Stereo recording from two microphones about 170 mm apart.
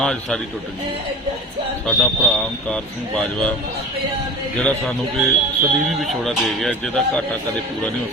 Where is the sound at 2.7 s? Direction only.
5° left (ahead or behind).